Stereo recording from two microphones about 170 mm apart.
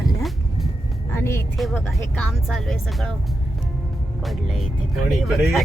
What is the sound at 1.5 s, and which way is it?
Speech, centre (ahead or behind).